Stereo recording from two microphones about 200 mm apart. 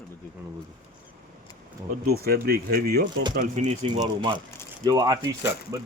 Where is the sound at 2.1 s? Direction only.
50° right (ahead or behind).